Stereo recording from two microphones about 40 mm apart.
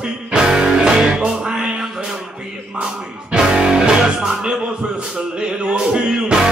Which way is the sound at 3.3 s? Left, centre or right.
Right.